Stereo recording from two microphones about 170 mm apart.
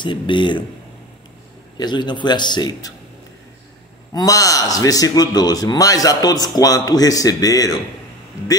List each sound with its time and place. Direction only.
0.0 s a man's voice: 30° left (ahead or behind)
1.8 s a man's voice: 25° left (ahead or behind)
4.1 s a man's voice: 20° left (ahead or behind)